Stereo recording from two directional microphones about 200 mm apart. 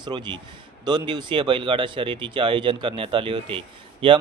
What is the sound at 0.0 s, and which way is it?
Speech, 20° right (ahead or behind).